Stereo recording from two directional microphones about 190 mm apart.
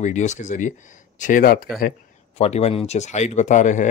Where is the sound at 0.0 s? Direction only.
40° left (ahead or behind).